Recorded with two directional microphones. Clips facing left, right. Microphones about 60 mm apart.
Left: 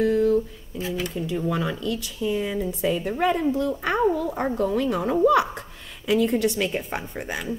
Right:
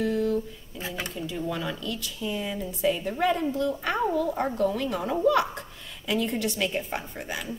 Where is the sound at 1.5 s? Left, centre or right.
Left.